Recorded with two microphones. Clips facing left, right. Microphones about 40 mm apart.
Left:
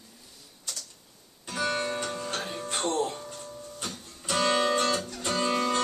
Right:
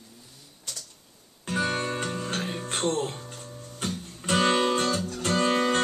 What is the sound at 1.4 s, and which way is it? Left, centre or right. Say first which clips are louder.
Music: right 2 dB; right.